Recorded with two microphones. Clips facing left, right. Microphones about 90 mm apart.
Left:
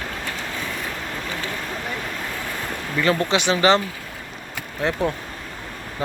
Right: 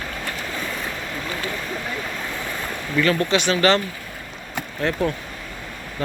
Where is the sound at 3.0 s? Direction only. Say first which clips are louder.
Even; 25° left (ahead or behind).